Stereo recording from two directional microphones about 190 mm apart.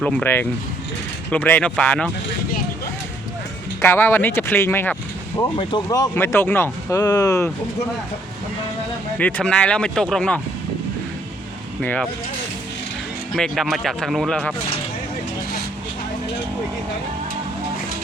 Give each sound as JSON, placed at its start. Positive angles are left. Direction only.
{"t": 0.0, "sound": "speech", "side_deg": 10}
{"t": 3.8, "sound": "speech", "side_deg": 10}
{"t": 5.5, "sound": "speech", "side_deg": 20}
{"t": 9.1, "sound": "speech", "side_deg": 5}
{"t": 11.8, "sound": "speech", "side_deg": 5}
{"t": 13.3, "sound": "speech", "side_deg": 0}